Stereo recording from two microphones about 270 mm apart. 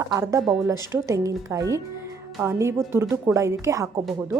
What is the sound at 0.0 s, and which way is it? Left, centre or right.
A woman's voice, centre.